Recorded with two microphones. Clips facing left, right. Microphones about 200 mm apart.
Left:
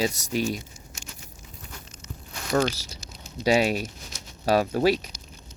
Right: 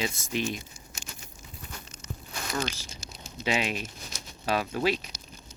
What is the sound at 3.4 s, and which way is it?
Speech, 40° left (ahead or behind).